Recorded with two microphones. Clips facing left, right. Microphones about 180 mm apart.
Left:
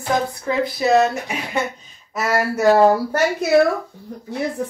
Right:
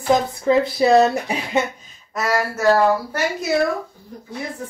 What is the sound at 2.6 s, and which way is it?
Speech, 20° left (ahead or behind).